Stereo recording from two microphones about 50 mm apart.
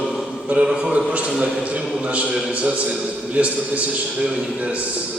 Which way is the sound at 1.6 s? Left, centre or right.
Right.